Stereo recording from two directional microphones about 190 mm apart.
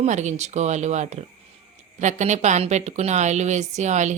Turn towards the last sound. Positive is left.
turn(degrees=-40)  # may be behind; listen again after turning